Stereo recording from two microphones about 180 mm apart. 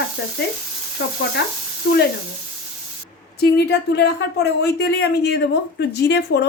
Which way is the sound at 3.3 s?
65° left (ahead or behind).